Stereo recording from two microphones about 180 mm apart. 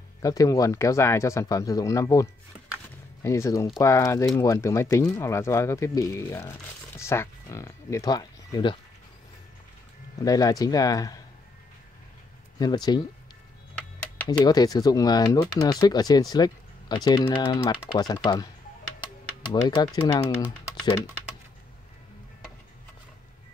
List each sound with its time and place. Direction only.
0.2 s speech: 20° left (ahead or behind)
10.2 s speech: 20° left (ahead or behind)
12.5 s speech: 20° left (ahead or behind)
14.4 s speech: 20° left (ahead or behind)
19.5 s speech: 25° left (ahead or behind)